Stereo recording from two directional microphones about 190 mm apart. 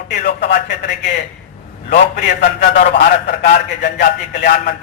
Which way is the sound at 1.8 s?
45° left (ahead or behind).